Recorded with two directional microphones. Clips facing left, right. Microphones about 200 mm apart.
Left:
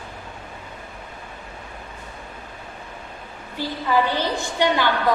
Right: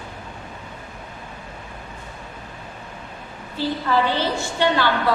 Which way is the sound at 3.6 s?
15° left (ahead or behind).